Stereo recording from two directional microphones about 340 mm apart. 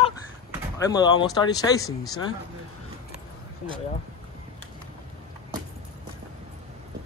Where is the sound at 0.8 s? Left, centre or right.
Centre.